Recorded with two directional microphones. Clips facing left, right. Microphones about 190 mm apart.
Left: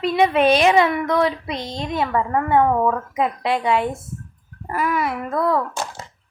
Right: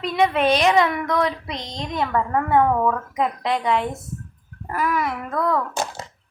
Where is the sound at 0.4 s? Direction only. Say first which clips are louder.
Left 2 dB; 10° left (ahead or behind).